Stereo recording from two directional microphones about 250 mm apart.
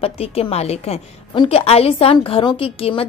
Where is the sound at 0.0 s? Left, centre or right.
Left.